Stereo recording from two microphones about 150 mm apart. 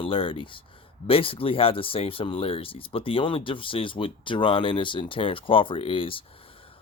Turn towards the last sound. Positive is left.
turn(degrees=35)  # may be behind; listen again after turning